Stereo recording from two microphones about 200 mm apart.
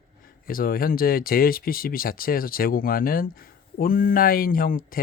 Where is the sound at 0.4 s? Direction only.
45° left (ahead or behind).